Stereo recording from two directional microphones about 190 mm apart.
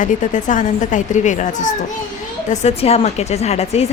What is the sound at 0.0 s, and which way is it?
A woman's voice, 40° left (ahead or behind).